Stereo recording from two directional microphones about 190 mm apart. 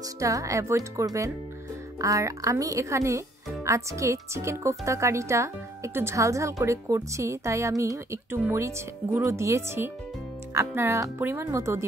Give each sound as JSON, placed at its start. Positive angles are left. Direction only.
{"t": 0.2, "sound": "speech", "side_deg": -15}